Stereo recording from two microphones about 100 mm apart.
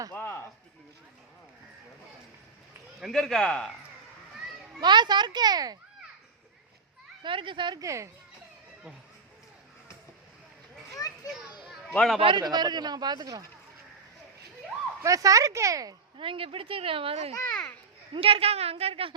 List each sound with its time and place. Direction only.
0.1 s a sound: 20° left (ahead or behind)
3.0 s speech: 5° left (ahead or behind)
4.8 s speech: 50° right (ahead or behind)
7.2 s speech: 55° right (ahead or behind)
7.8 s speech: 30° right (ahead or behind)
10.9 s children playing: 40° left (ahead or behind)
11.9 s speech: centre (ahead or behind)
12.2 s speech: 50° right (ahead or behind)
15.0 s speech: 35° right (ahead or behind)
16.1 s speech: 60° right (ahead or behind)
17.5 s a child's voice: 10° left (ahead or behind)
18.1 s a woman's voice: 75° right (ahead or behind)